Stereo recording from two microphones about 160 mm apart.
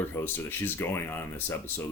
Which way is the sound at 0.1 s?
15° left (ahead or behind).